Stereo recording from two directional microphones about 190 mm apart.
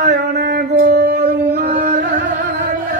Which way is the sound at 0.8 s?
55° right (ahead or behind).